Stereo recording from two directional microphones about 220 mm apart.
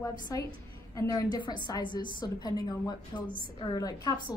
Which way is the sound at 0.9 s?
15° left (ahead or behind).